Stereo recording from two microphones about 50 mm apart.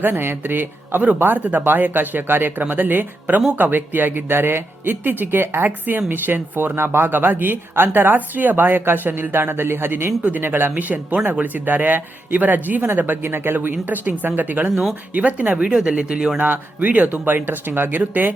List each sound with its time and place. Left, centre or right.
0.0 s speech: right
10.2 s speech: right
15.5 s speech: centre
16.4 s speech: right